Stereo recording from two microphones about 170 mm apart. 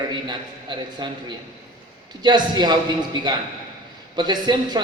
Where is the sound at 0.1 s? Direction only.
25° right (ahead or behind).